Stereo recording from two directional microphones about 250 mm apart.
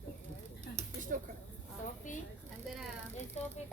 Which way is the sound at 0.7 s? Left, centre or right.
Right.